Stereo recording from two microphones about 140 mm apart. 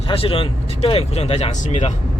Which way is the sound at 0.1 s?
40° left (ahead or behind).